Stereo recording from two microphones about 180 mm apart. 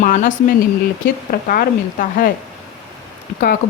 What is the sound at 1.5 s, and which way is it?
Speech, 50° left (ahead or behind).